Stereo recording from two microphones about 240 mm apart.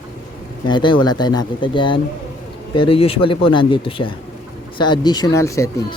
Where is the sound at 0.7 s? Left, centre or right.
Centre.